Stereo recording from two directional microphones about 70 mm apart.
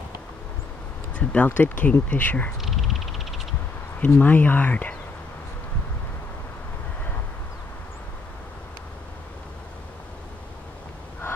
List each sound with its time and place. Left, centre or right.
1.1 s speech: centre
2.6 s a sound: centre
4.0 s speech: left